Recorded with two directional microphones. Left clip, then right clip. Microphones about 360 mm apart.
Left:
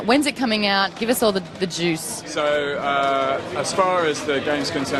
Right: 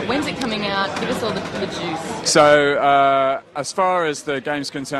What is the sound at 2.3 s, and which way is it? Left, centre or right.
Speech, right.